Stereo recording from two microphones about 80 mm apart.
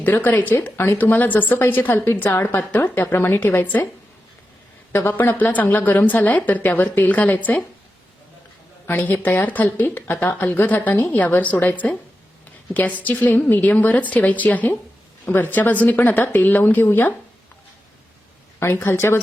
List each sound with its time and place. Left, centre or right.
0.0 s a woman's voice: left
4.9 s a woman's voice: left
8.9 s a woman's voice: left
18.6 s speech: left